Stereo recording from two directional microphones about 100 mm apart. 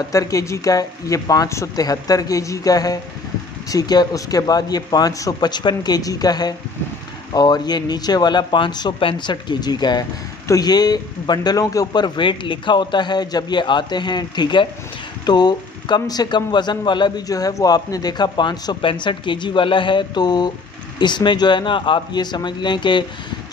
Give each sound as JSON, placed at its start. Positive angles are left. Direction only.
{"t": 0.1, "sound": "a man's voice", "side_deg": 35}